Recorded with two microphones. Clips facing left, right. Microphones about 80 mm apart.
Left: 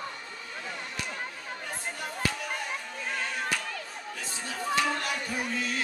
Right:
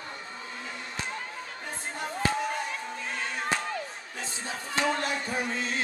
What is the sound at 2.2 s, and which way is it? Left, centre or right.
Music, right.